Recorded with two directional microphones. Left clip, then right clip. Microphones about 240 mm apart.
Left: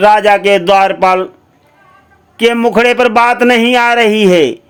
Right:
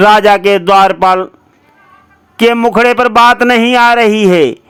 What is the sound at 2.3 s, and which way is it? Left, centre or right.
A man's voice, centre.